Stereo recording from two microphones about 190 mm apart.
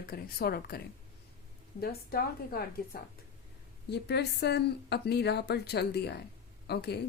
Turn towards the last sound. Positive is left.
turn(degrees=60)  # may be behind; listen again after turning